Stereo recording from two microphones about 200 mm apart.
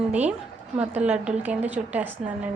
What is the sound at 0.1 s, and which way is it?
A woman's voice, 5° right (ahead or behind).